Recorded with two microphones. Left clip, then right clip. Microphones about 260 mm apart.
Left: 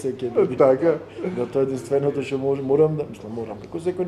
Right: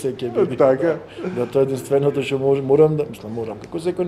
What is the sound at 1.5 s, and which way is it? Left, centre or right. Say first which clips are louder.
A man's voice: right 4 dB; right.